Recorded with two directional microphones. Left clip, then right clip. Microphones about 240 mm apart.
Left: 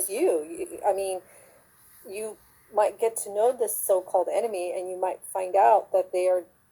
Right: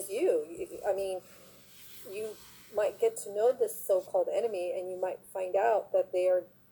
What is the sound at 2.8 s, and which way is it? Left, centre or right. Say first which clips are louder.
A woman's voice: left 5 dB; left.